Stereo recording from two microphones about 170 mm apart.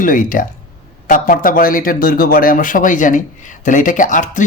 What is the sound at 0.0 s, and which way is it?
A man's voice, 50° left (ahead or behind).